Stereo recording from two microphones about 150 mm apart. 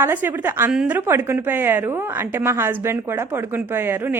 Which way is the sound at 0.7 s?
5° right (ahead or behind).